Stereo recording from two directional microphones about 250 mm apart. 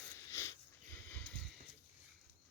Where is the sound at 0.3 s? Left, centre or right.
Centre.